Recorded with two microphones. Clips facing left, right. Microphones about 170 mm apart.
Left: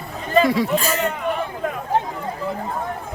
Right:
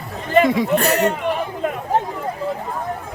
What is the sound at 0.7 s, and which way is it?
Speech, 65° right (ahead or behind).